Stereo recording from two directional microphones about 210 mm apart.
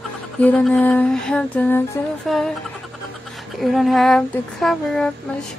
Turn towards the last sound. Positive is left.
turn(degrees=0)  # may be behind; listen again after turning